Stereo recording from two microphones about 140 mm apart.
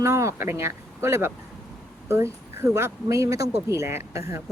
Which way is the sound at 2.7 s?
20° right (ahead or behind).